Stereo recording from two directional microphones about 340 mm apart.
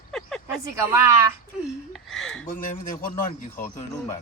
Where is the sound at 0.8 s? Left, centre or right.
Centre.